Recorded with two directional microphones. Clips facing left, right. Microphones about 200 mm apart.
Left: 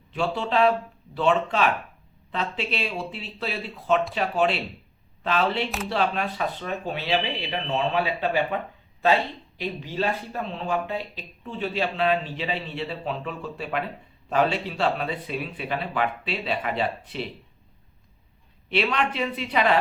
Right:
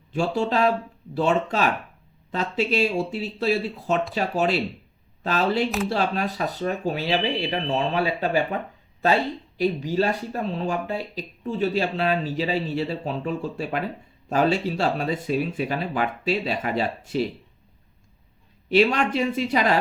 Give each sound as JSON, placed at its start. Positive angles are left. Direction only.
{"t": 0.1, "sound": "speech", "side_deg": -40}
{"t": 9.6, "sound": "speech", "side_deg": -40}
{"t": 18.7, "sound": "speech", "side_deg": -40}